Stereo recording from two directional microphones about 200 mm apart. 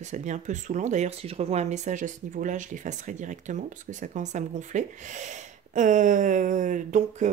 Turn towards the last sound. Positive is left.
turn(degrees=-40)  # may be behind; listen again after turning